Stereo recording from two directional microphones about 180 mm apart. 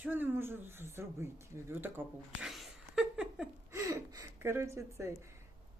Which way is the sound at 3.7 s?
15° right (ahead or behind).